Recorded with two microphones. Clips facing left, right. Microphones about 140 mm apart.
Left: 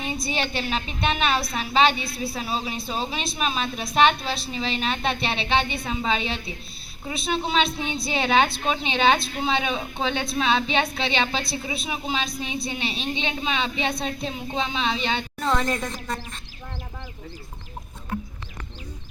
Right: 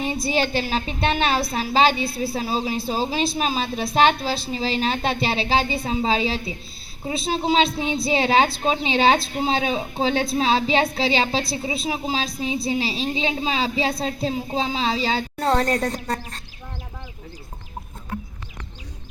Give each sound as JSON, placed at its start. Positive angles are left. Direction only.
{"t": 0.3, "sound": "a woman's voice", "side_deg": -35}